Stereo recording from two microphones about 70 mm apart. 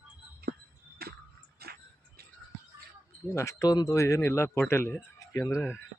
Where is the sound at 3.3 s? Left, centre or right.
Left.